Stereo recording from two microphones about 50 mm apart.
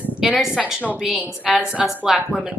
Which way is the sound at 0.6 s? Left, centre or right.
Centre.